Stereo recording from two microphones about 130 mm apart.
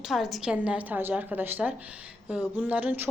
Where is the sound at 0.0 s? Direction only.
5° right (ahead or behind).